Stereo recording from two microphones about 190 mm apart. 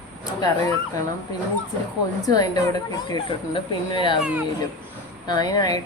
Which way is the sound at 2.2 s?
20° left (ahead or behind).